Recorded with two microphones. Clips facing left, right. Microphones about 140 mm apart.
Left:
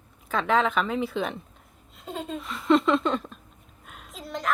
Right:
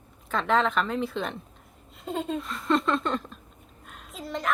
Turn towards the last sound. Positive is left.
turn(degrees=0)  # may be behind; listen again after turning